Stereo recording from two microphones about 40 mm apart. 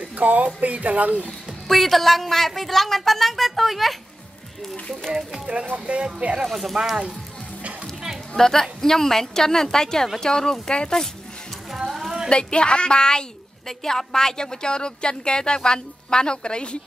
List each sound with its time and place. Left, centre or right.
0.2 s speech: right
1.7 s speech: centre
5.9 s speech: right
6.4 s speech: centre
8.4 s a woman's voice: centre
11.7 s a sound: centre
12.3 s a woman's voice: left